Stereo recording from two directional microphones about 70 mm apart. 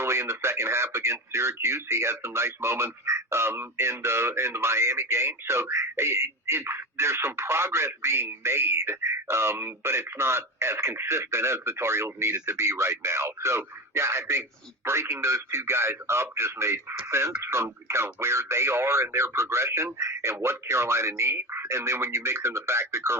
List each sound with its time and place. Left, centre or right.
0.0 s speech: right